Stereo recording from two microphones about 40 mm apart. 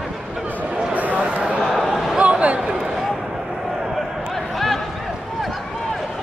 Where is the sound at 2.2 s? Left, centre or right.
Right.